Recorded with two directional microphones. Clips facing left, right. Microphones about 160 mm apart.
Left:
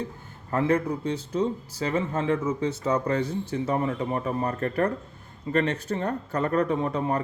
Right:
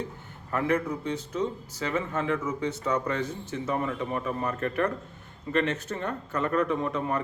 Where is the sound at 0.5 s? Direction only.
30° left (ahead or behind).